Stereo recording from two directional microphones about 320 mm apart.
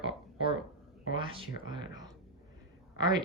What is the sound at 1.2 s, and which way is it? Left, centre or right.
Speech, centre.